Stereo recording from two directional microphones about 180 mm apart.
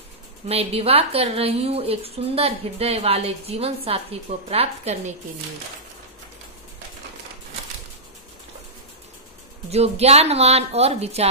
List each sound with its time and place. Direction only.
0.5 s a woman's voice: 35° right (ahead or behind)
9.7 s a woman's voice: 35° right (ahead or behind)